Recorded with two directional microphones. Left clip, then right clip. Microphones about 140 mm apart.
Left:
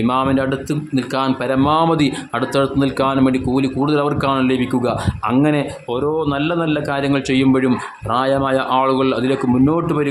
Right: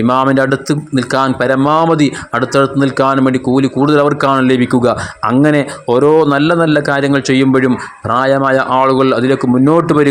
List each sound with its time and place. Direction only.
0.1 s a man's voice: 35° right (ahead or behind)
5.9 s a man's voice: 50° right (ahead or behind)